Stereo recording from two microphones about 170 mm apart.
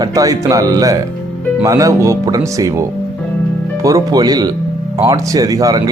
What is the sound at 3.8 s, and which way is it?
Speech, 20° right (ahead or behind).